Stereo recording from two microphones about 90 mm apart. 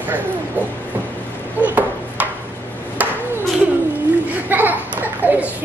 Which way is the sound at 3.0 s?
20° right (ahead or behind).